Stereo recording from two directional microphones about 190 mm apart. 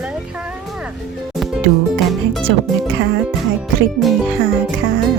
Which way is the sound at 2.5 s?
60° right (ahead or behind).